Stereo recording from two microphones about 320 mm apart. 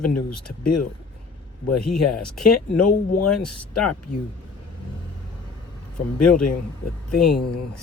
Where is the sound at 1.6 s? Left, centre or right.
Left.